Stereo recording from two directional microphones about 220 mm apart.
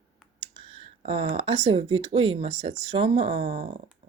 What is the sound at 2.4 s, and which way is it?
Speech, 30° right (ahead or behind).